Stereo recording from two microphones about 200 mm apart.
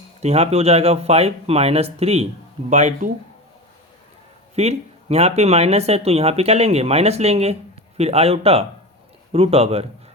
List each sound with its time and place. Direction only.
0.2 s speech: 30° right (ahead or behind)
4.5 s a man's voice: 35° right (ahead or behind)